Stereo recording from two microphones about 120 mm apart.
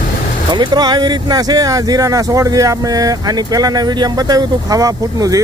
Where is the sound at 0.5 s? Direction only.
40° right (ahead or behind).